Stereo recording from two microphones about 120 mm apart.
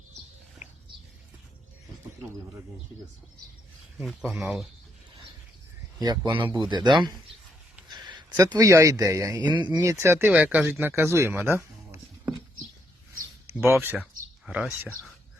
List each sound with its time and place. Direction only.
4.3 s speech: centre (ahead or behind)
6.0 s a man's voice: 35° right (ahead or behind)
9.7 s speech: 25° right (ahead or behind)
13.5 s speech: 20° right (ahead or behind)